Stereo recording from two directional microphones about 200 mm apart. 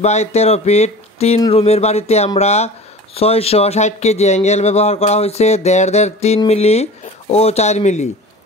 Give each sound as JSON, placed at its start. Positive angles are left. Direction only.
{"t": 0.0, "sound": "speech", "side_deg": 35}